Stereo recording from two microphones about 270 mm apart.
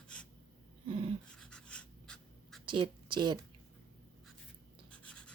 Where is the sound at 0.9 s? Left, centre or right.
Centre.